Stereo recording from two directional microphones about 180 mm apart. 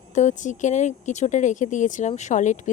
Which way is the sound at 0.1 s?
40° left (ahead or behind).